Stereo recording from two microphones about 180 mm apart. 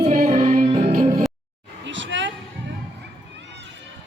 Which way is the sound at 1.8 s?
90° right.